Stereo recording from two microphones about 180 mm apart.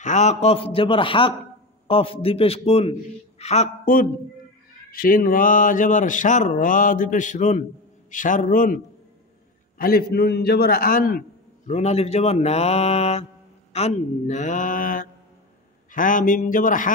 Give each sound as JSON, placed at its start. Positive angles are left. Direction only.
{"t": 0.0, "sound": "a man's voice", "side_deg": 40}
{"t": 5.0, "sound": "mantra", "side_deg": 50}
{"t": 9.8, "sound": "a man's voice", "side_deg": 55}
{"t": 11.7, "sound": "a man's voice", "side_deg": 35}
{"t": 13.7, "sound": "mantra", "side_deg": 40}